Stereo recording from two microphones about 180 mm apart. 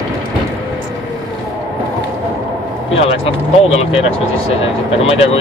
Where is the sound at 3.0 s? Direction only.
35° left (ahead or behind).